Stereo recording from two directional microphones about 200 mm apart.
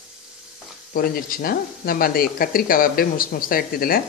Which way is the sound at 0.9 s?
45° left (ahead or behind).